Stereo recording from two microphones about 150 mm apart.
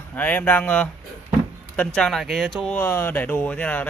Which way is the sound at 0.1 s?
10° left (ahead or behind).